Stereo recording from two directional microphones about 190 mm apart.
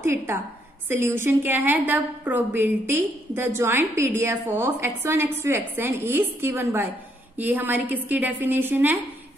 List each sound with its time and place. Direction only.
0.0 s a woman's voice: 15° right (ahead or behind)